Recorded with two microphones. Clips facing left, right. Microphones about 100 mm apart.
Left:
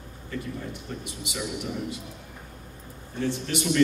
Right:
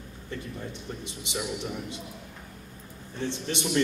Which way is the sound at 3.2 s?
25° right (ahead or behind).